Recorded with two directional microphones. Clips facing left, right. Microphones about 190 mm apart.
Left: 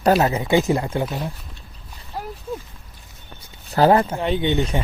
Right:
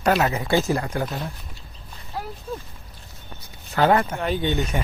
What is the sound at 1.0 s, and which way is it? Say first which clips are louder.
Speech: left 3 dB; centre (ahead or behind).